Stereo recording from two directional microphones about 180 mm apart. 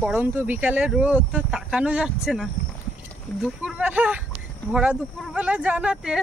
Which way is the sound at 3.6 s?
5° right (ahead or behind).